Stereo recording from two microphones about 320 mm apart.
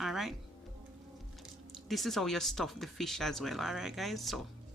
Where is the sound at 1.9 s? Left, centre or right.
Centre.